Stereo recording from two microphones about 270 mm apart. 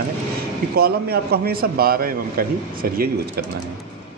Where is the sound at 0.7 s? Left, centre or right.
Right.